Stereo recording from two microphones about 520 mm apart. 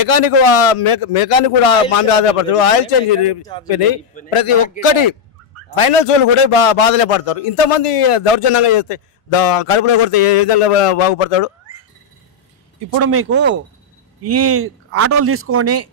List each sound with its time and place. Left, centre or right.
0.0 s speech: left
4.3 s a man's voice: left
4.8 s a man's voice: left
5.8 s a man's voice: left
13.0 s speech: right